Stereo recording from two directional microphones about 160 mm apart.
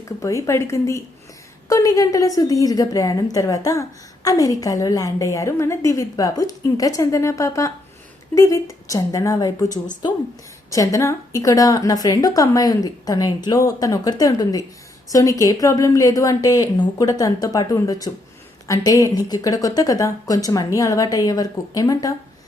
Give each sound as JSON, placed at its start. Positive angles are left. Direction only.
{"t": 0.0, "sound": "a woman's voice", "side_deg": 20}